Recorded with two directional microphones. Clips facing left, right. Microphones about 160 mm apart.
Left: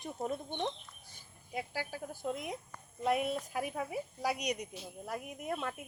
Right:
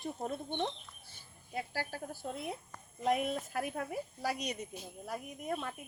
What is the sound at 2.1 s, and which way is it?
Speech, 15° left (ahead or behind).